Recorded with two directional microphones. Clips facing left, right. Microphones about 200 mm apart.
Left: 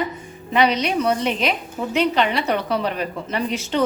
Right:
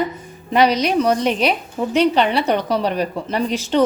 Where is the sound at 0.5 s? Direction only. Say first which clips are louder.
Right 3 dB; 40° right (ahead or behind).